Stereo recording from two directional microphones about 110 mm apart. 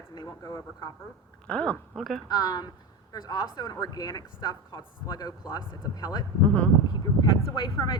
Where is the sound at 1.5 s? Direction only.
10° left (ahead or behind).